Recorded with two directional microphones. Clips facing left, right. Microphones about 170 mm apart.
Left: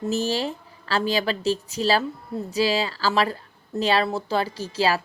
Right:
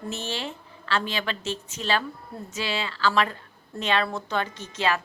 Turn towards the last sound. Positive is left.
turn(degrees=35)  # may be behind; listen again after turning